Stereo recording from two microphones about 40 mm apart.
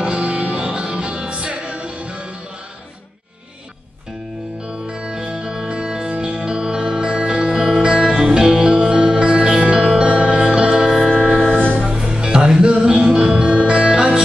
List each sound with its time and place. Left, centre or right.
0.0 s music: right
5.0 s music: right
5.3 s music: centre
11.5 s music: left
11.9 s music: centre